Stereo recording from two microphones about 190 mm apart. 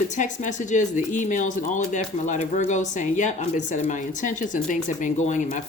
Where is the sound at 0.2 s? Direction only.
40° left (ahead or behind).